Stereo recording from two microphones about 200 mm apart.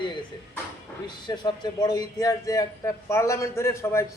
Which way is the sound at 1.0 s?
20° left (ahead or behind).